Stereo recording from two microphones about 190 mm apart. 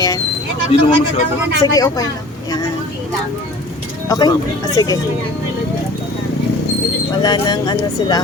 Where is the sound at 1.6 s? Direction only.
20° left (ahead or behind).